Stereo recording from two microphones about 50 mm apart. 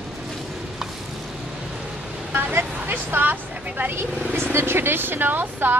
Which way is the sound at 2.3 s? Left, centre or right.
Right.